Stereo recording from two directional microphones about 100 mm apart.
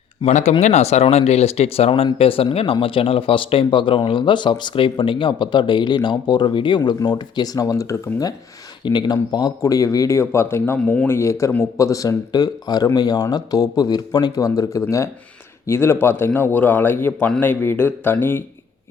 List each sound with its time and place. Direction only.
0.3 s speech: 90° left; by 8.3 s 35° left (ahead or behind)
8.8 s speech: 45° left (ahead or behind); by 10.8 s 25° left (ahead or behind)
10.8 s a man's voice: 15° left (ahead or behind)